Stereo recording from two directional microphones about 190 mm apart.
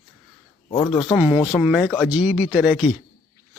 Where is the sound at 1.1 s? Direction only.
10° right (ahead or behind).